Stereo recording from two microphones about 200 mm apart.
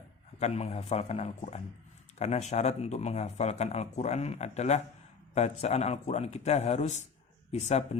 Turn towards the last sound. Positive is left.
turn(degrees=35)  # may be behind; listen again after turning